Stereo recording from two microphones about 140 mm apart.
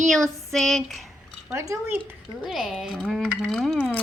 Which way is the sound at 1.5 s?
20° right (ahead or behind).